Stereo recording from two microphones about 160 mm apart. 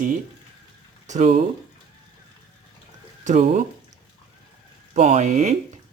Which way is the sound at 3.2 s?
50° right (ahead or behind).